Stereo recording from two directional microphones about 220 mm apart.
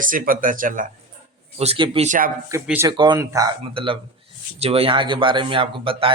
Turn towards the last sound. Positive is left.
turn(degrees=-25)  # may be behind; listen again after turning